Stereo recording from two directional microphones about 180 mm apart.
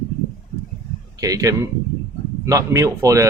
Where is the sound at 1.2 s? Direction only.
20° right (ahead or behind).